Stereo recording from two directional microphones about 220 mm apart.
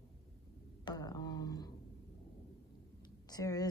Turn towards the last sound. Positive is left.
turn(degrees=15)  # may be behind; listen again after turning